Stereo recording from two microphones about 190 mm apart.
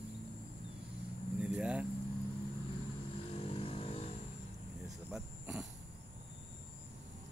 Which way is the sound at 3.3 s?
30° left (ahead or behind).